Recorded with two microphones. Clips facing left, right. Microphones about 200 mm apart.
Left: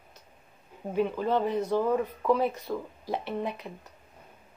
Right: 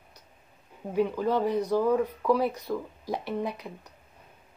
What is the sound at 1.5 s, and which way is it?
A woman's voice, 15° right (ahead or behind).